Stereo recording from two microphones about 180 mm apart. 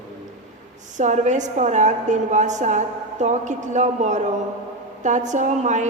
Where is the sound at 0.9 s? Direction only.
40° right (ahead or behind).